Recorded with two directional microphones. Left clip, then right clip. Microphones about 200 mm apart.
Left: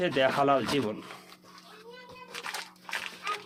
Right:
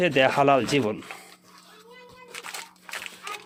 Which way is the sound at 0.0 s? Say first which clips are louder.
Right 5 dB; 40° right (ahead or behind).